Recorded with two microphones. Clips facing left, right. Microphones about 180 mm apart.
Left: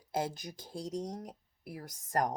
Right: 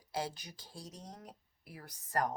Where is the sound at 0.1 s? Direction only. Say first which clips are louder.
Left 4 dB; 50° left (ahead or behind).